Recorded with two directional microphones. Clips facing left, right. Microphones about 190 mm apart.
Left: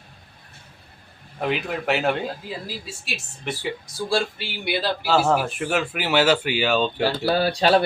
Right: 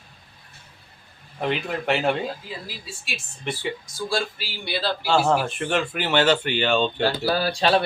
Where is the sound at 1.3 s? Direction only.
5° left (ahead or behind).